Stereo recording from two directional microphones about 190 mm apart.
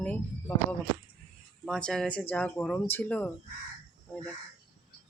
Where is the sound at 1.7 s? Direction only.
5° left (ahead or behind).